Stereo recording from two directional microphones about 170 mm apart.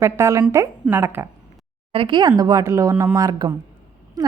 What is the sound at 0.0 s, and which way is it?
A woman's voice, 15° right (ahead or behind).